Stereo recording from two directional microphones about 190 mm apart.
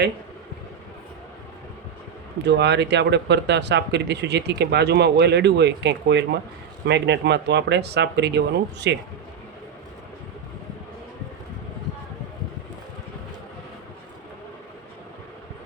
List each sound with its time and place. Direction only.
2.4 s speech: 65° right (ahead or behind)